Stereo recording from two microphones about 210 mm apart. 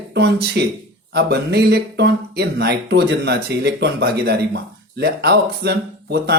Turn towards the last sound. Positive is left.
turn(degrees=-50)  # may be behind; listen again after turning